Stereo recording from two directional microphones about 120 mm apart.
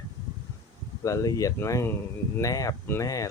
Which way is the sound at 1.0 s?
30° left (ahead or behind).